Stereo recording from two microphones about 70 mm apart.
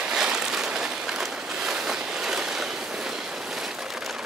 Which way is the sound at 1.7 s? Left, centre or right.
Centre.